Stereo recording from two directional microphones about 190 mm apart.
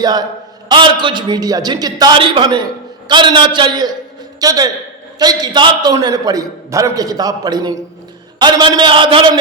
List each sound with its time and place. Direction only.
0.0 s a man's voice: 20° right (ahead or behind)